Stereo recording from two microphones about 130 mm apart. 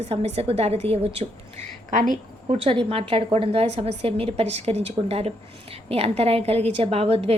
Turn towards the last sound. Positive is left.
turn(degrees=-50)  # may be behind; listen again after turning